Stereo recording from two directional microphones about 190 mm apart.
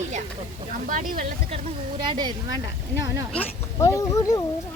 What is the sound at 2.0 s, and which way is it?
Speech, 25° right (ahead or behind).